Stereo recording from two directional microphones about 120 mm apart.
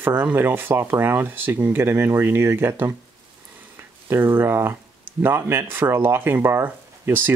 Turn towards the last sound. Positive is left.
turn(degrees=-15)  # may be behind; listen again after turning